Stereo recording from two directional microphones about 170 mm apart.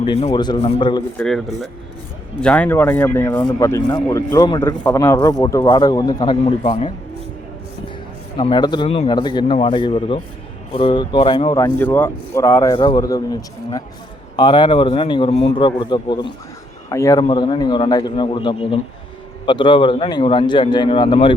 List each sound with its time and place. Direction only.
0.0 s a man's voice: 35° left (ahead or behind)
1.1 s a man's voice: 5° left (ahead or behind); by 4.7 s 25° left (ahead or behind)
4.8 s a man's voice: 15° left (ahead or behind)
8.4 s a man's voice: 25° left (ahead or behind)